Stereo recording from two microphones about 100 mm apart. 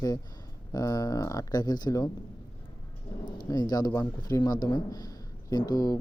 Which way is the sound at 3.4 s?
40° left (ahead or behind).